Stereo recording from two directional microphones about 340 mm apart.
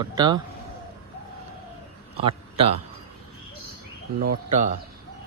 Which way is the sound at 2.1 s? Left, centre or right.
Centre.